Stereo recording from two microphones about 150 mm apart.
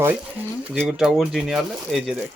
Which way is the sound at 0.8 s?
Centre (ahead or behind).